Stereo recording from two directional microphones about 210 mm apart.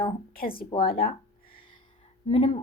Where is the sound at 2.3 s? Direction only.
25° left (ahead or behind).